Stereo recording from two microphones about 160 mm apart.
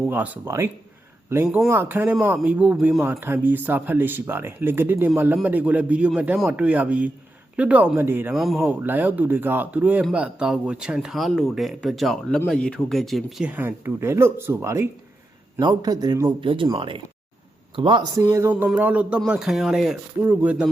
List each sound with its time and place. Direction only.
0.1 s speech: 10° right (ahead or behind)
1.5 s speech: 5° right (ahead or behind)
8.4 s speech: centre (ahead or behind)
8.6 s a man's voice: 10° right (ahead or behind)